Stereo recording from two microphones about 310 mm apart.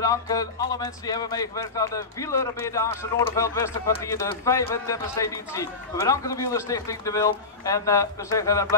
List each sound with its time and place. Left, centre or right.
0.0 s speech: centre